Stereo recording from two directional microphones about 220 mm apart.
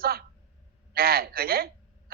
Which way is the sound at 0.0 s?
45° right (ahead or behind).